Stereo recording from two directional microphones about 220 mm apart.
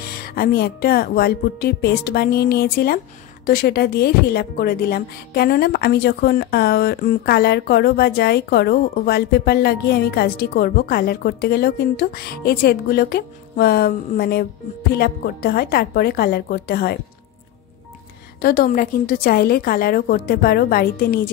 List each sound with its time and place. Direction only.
0.1 s a woman's voice: 40° left (ahead or behind)
18.4 s a woman's voice: 40° left (ahead or behind)